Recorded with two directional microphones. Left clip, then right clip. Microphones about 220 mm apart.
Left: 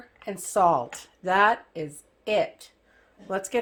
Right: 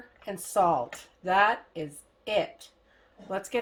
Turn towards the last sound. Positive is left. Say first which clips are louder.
# left 3 dB
turn(degrees=30)  # may be behind; listen again after turning